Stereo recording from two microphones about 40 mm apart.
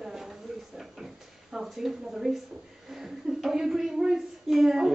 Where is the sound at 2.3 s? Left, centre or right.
Centre.